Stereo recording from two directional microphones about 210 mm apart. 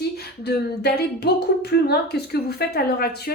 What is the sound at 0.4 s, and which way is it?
A woman's voice, 50° left (ahead or behind).